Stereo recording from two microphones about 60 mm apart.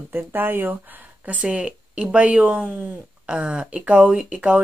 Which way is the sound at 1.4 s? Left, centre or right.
Centre.